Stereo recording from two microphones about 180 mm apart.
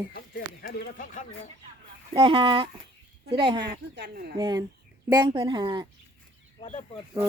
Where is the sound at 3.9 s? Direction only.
65° right (ahead or behind).